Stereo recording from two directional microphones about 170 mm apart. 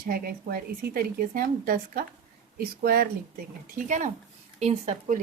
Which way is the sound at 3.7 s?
50° right (ahead or behind).